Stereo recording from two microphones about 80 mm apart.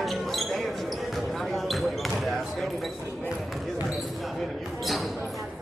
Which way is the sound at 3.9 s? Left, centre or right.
Centre.